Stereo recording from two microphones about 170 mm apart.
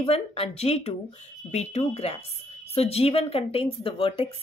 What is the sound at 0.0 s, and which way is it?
A woman's voice, 35° left (ahead or behind).